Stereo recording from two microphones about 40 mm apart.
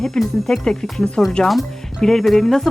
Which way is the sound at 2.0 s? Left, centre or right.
Centre.